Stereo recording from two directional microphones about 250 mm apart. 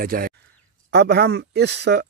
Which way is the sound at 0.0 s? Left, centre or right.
Right.